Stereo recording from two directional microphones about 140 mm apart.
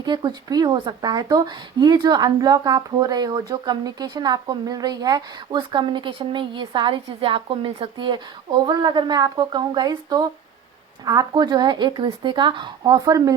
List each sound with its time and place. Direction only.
0.0 s speech: 30° right (ahead or behind)